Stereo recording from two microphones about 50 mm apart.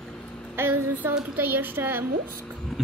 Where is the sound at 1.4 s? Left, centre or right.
Right.